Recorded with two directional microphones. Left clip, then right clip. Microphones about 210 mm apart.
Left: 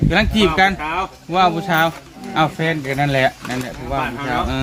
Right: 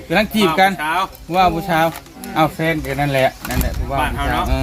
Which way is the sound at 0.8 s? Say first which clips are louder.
Right 3 dB; 45° right (ahead or behind).